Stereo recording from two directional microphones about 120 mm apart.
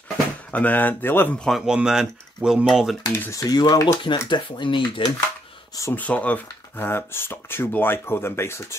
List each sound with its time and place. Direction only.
0.5 s speech: 15° left (ahead or behind)
1.4 s speech: centre (ahead or behind)
3.0 s speech: 30° left (ahead or behind)
5.9 s speech: 10° left (ahead or behind)